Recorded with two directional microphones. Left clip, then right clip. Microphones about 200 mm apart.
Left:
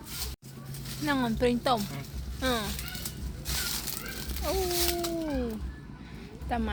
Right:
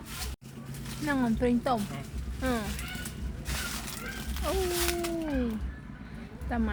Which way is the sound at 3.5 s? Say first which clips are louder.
Left 2 dB; 50° left (ahead or behind).